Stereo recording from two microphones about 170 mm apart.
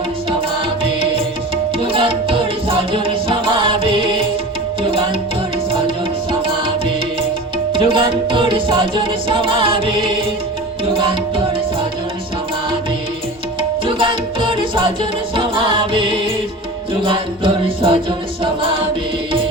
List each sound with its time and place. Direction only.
1.8 s music: 30° right (ahead or behind)
7.7 s music: 30° right (ahead or behind)
13.6 s tabla: 30° right (ahead or behind)
15.4 s music: 30° right (ahead or behind)